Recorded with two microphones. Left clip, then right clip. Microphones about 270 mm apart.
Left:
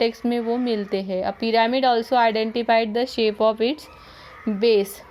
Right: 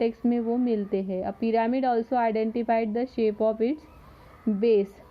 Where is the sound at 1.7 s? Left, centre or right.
Centre.